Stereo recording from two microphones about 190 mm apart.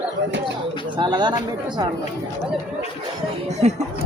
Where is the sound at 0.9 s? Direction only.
25° right (ahead or behind).